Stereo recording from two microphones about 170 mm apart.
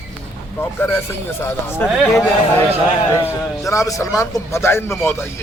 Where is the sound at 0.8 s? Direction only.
10° left (ahead or behind).